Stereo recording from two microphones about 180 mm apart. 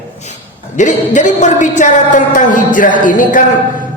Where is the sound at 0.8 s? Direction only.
45° left (ahead or behind).